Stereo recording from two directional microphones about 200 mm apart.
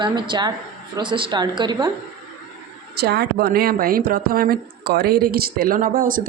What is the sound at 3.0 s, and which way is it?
Speech, 55° right (ahead or behind).